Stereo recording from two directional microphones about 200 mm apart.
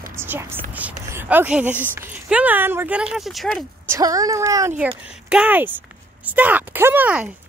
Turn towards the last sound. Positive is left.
turn(degrees=-10)  # may be behind; listen again after turning